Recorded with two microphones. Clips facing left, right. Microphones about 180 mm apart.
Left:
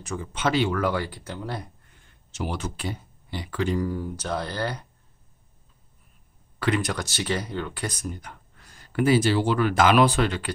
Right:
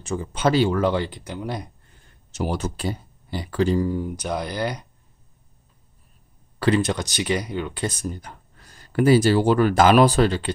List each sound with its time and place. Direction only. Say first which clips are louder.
0.0 s speech: right 5 dB; 35° right (ahead or behind); by 1.7 s 15° right (ahead or behind)
1.9 s speech: right 2 dB; 40° right (ahead or behind); by 4.8 s 15° right (ahead or behind)
6.6 s speech: right 5 dB; 30° right (ahead or behind)